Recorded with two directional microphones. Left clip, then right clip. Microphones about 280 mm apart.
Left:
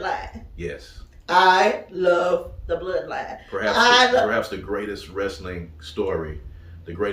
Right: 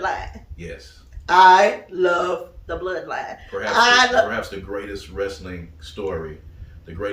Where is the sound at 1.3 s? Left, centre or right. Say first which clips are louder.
Right 4 dB; centre.